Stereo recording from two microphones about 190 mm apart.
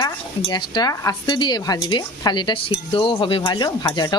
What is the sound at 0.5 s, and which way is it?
A woman's voice, 20° left (ahead or behind).